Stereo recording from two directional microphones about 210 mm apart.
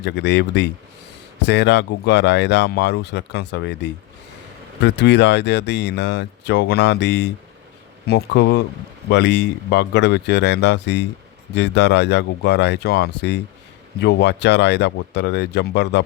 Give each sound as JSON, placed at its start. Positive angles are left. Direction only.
{"t": 0.0, "sound": "speech", "side_deg": 55}